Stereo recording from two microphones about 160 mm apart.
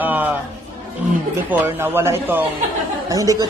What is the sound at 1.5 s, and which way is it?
A man's voice, 15° right (ahead or behind).